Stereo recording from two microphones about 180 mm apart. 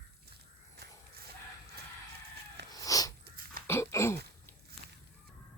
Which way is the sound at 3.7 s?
15° left (ahead or behind).